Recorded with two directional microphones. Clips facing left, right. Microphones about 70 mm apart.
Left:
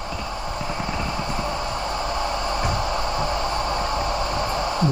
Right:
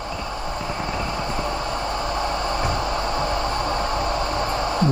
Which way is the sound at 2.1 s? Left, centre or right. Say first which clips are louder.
Right 1 dB; right.